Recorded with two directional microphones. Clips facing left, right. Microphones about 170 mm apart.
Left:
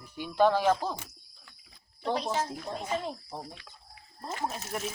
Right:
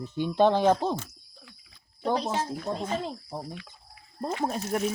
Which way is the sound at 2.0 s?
35° right (ahead or behind).